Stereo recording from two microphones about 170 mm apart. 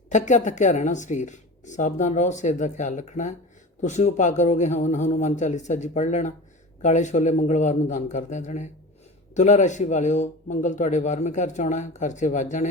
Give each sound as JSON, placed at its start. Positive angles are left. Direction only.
{"t": 0.1, "sound": "speech", "side_deg": 45}